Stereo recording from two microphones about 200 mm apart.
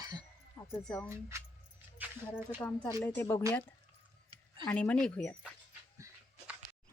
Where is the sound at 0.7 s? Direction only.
5° left (ahead or behind).